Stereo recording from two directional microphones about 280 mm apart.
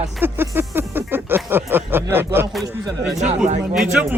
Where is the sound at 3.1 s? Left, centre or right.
Right.